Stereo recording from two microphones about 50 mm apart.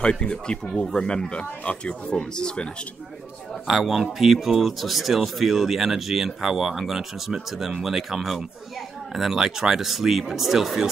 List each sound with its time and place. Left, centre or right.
0.0 s speech: centre
3.6 s speech: centre